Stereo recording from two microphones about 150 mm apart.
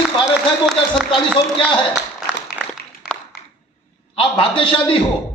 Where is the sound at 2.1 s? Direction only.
5° right (ahead or behind).